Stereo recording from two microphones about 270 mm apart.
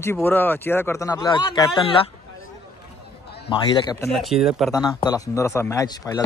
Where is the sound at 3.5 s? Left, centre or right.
Centre.